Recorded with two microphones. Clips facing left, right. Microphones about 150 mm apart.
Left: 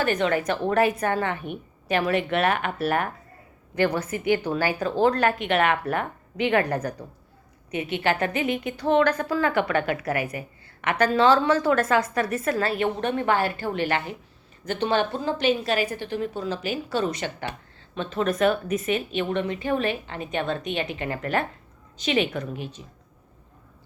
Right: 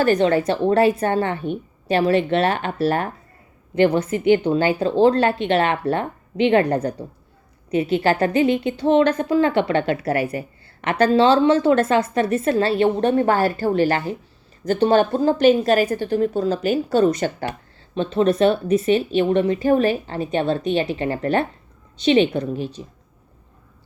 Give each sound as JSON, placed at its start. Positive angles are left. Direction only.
{"t": 0.0, "sound": "a woman's voice", "side_deg": -35}